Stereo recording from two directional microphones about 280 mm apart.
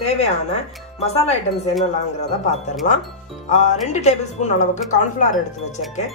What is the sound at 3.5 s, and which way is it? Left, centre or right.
Speech, left.